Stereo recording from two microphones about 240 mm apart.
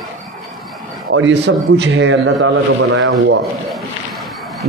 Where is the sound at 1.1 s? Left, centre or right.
Right.